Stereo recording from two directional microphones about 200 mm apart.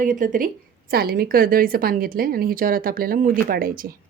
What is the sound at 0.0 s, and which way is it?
A woman's voice, 40° right (ahead or behind).